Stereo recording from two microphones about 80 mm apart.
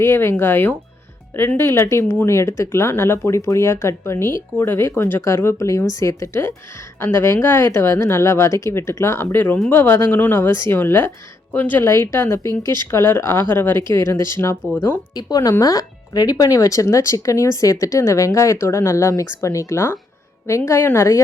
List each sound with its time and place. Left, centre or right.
0.0 s speech: left
11.8 s speech: left
15.1 s speech: left